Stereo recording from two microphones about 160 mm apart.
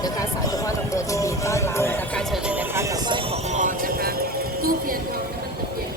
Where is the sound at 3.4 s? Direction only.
50° right (ahead or behind); by 5.0 s 65° right (ahead or behind).